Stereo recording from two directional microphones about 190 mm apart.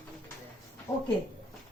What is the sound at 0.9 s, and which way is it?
Speech, 15° left (ahead or behind).